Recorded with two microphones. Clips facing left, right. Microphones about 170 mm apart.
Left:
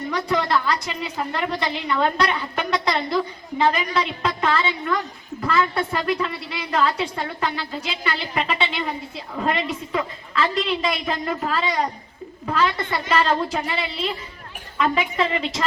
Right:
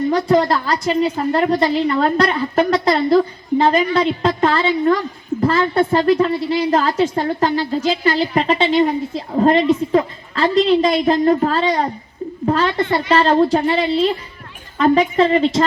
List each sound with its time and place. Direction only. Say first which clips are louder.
0.1 s a woman's voice: right 5 dB; 35° right (ahead or behind)